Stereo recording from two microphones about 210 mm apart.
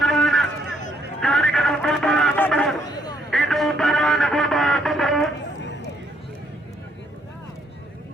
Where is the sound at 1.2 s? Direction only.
Centre (ahead or behind).